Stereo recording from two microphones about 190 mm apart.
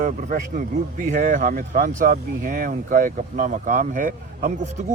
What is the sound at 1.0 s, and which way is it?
Speech, 40° right (ahead or behind).